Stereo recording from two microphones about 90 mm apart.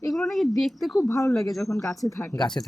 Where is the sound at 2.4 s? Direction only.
10° left (ahead or behind).